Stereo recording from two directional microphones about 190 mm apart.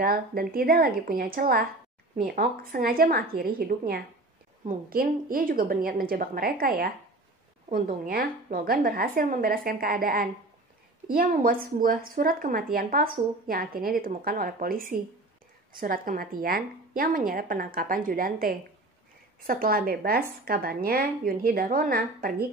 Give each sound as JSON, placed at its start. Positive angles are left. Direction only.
{"t": 0.0, "sound": "speech", "side_deg": -50}